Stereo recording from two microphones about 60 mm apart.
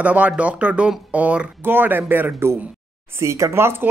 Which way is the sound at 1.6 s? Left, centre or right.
Right.